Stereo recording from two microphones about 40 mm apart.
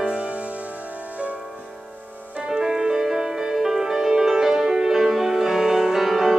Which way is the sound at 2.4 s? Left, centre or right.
Centre.